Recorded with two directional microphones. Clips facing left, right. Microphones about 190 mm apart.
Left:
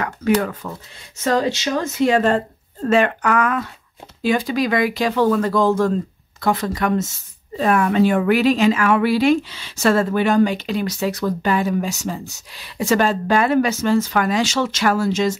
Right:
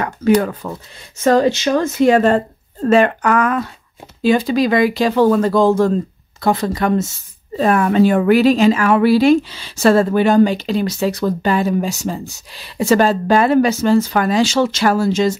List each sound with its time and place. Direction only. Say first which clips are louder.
0.0 s speech: right 4 dB; 35° right (ahead or behind)
1.2 s speech: right 6 dB; 50° right (ahead or behind)
2.9 s a woman's voice: right 4 dB; 35° right (ahead or behind)